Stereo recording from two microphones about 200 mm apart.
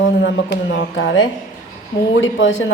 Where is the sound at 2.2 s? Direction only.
70° left (ahead or behind).